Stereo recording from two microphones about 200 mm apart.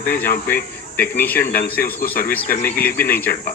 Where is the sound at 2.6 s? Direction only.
10° left (ahead or behind).